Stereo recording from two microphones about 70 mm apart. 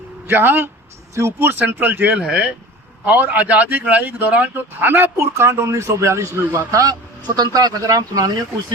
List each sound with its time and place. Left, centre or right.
0.3 s a man's voice: right
5.1 s a man's voice: right
6.7 s a man's voice: right
7.3 s speech: right